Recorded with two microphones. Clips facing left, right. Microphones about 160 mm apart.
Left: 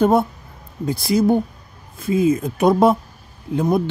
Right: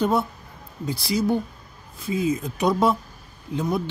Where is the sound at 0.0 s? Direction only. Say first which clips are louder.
Left 6 dB; 55° left (ahead or behind).